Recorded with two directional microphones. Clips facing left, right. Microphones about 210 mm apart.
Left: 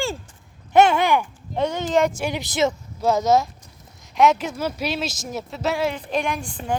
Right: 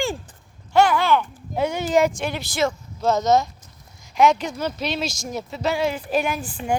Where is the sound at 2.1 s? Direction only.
15° left (ahead or behind).